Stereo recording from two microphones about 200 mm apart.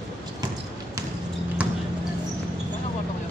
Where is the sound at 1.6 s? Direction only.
5° right (ahead or behind).